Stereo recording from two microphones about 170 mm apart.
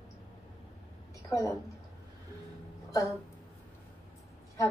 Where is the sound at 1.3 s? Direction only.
20° left (ahead or behind).